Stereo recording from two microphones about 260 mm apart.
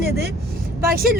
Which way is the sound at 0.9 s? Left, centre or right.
Right.